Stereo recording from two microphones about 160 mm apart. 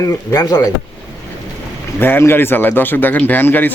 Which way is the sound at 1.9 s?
15° left (ahead or behind).